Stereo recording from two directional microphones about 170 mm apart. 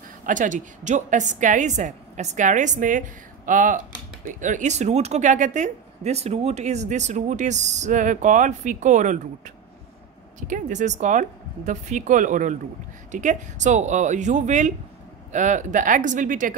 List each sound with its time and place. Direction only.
0.3 s a woman's voice: 50° right (ahead or behind)
10.4 s a woman's voice: 45° right (ahead or behind)